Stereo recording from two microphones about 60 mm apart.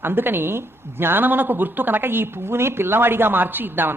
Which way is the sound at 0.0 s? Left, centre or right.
Right.